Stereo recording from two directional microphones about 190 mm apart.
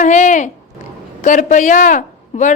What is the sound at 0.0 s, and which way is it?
Speech, 40° left (ahead or behind).